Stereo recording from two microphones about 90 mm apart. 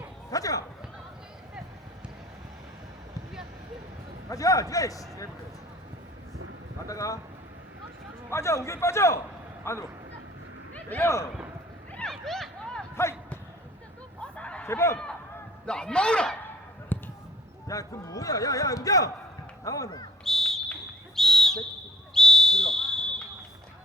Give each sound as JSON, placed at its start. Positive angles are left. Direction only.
{"t": 0.3, "sound": "speech", "side_deg": 40}
{"t": 4.3, "sound": "a man's voice", "side_deg": 40}
{"t": 6.8, "sound": "a man's voice", "side_deg": 40}
{"t": 8.3, "sound": "a man's voice", "side_deg": 30}
{"t": 11.0, "sound": "a man's voice", "side_deg": 30}
{"t": 12.0, "sound": "a sound", "side_deg": 5}
{"t": 14.2, "sound": "a sound", "side_deg": 10}
{"t": 14.7, "sound": "a man's voice", "side_deg": 30}
{"t": 15.6, "sound": "a man's voice", "side_deg": 10}
{"t": 16.9, "sound": "a sound", "side_deg": 20}
{"t": 17.7, "sound": "a man's voice", "side_deg": 40}
{"t": 20.2, "sound": "a sound", "side_deg": 5}